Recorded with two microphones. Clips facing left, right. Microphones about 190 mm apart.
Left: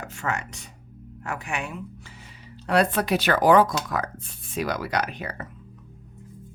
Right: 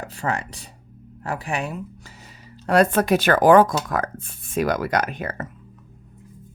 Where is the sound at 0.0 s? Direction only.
35° right (ahead or behind).